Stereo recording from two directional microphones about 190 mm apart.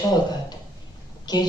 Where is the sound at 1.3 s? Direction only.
20° left (ahead or behind).